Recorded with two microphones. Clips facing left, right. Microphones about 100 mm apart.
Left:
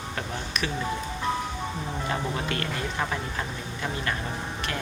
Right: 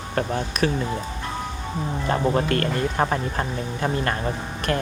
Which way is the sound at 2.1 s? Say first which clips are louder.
Right 10 dB; 45° right (ahead or behind).